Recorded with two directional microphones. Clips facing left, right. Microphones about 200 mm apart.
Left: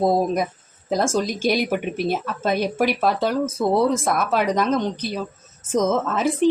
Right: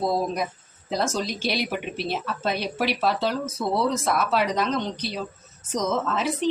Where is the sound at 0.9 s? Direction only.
50° left (ahead or behind).